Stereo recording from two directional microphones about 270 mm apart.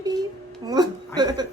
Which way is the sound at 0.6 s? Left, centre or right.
Centre.